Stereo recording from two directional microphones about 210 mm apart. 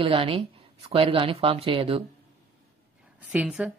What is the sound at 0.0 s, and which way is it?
Speech, 25° right (ahead or behind).